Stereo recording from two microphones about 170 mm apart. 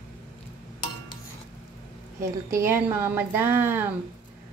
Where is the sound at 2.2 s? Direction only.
15° right (ahead or behind).